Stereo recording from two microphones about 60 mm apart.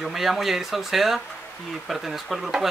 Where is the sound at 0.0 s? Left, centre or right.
Centre.